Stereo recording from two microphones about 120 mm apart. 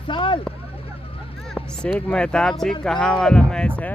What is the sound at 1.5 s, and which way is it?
Speech, 10° left (ahead or behind).